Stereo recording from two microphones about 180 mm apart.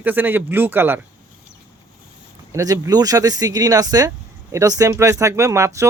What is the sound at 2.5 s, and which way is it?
Speech, 20° right (ahead or behind).